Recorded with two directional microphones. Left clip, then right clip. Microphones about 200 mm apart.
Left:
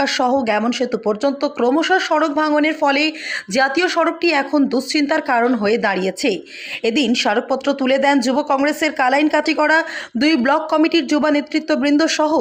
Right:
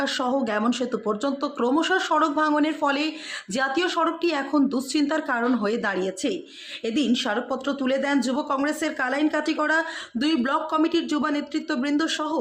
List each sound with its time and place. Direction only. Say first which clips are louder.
0.0 s speech: left 8 dB; 15° left (ahead or behind)